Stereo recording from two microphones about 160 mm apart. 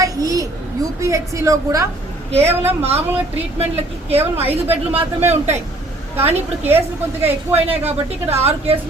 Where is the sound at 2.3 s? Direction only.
40° right (ahead or behind).